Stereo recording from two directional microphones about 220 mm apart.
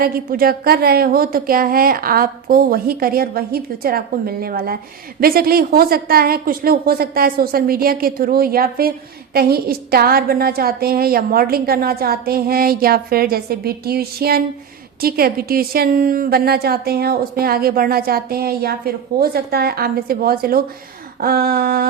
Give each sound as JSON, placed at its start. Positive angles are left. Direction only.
{"t": 0.0, "sound": "a woman's voice", "side_deg": -40}